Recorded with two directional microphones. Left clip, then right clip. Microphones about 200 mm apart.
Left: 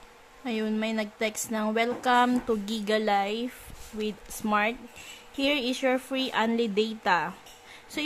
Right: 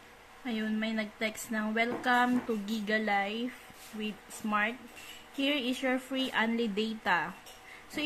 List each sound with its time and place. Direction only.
0.5 s a woman's voice: 55° left (ahead or behind)